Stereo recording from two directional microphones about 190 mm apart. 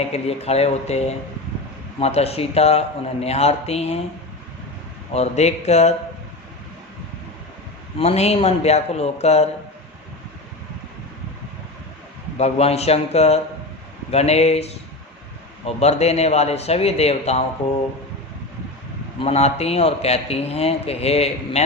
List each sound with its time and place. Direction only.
0.0 s a man's voice: 35° left (ahead or behind)
5.1 s a man's voice: 35° left (ahead or behind)
7.9 s a man's voice: 35° left (ahead or behind)
12.4 s a man's voice: 35° left (ahead or behind)
19.2 s a man's voice: 35° left (ahead or behind)